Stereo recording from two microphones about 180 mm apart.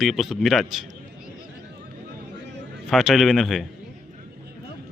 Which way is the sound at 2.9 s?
Centre (ahead or behind).